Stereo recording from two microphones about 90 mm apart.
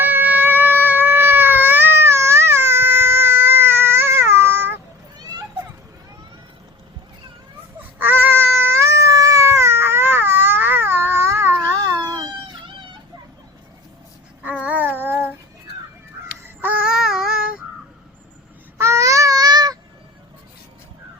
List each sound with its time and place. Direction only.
0.0 s baby cry: 20° right (ahead or behind)
5.1 s children playing: 45° right (ahead or behind)
7.8 s baby cry: 20° right (ahead or behind); by 12.2 s 40° right (ahead or behind)
14.4 s child singing: 15° right (ahead or behind)
16.8 s child singing: 5° right (ahead or behind)
18.8 s babbling: 35° right (ahead or behind)